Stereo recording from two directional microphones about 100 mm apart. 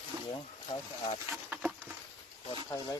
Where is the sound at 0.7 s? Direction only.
60° left (ahead or behind).